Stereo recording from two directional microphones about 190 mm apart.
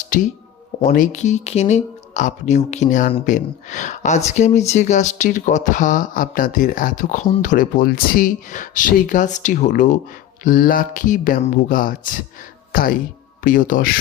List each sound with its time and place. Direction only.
0.1 s speech: 45° left (ahead or behind)